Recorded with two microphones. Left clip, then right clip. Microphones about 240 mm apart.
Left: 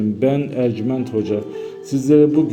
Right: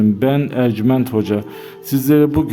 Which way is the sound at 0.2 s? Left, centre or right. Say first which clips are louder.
Right 1 dB; right.